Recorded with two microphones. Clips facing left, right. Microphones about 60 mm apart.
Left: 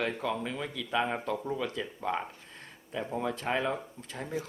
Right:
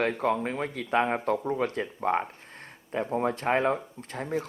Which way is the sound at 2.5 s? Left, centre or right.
Right.